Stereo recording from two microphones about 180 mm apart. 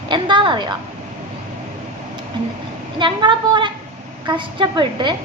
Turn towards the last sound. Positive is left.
turn(degrees=-25)  # may be behind; listen again after turning